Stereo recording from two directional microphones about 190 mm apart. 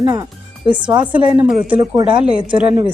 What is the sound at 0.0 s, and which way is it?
Speech, 15° right (ahead or behind).